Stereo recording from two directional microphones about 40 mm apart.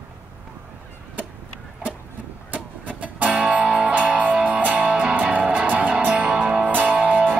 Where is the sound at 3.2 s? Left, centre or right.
Right.